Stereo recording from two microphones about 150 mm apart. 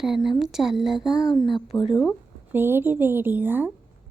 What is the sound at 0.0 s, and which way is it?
Speech, centre (ahead or behind).